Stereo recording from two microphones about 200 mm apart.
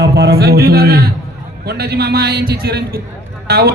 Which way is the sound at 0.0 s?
55° right (ahead or behind).